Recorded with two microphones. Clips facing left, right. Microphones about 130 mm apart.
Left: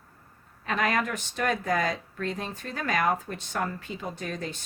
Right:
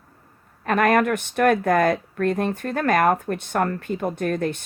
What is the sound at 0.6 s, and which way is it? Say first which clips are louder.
Speech: right 9 dB; 55° right (ahead or behind).